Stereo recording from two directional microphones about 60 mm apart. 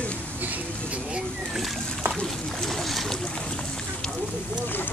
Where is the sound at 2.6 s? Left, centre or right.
Centre.